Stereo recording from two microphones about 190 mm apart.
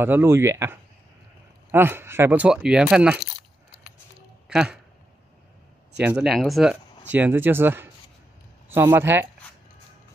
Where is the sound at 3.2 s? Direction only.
55° left (ahead or behind).